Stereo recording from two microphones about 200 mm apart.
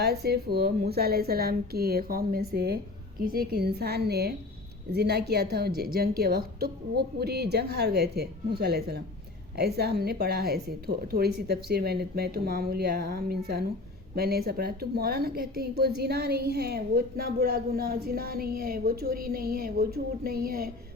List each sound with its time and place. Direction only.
0.0 s a woman's voice: 50° right (ahead or behind)